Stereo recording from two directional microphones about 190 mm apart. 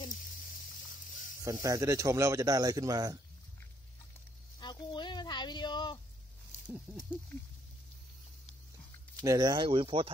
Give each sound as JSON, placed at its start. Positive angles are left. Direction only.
{"t": 1.4, "sound": "speech", "side_deg": -20}
{"t": 4.6, "sound": "a sound", "side_deg": 20}
{"t": 9.2, "sound": "speech", "side_deg": -20}